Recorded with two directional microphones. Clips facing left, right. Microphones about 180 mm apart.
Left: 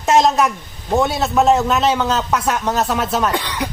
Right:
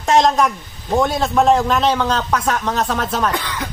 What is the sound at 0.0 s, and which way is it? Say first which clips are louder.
A man's voice: even; 5° left (ahead or behind).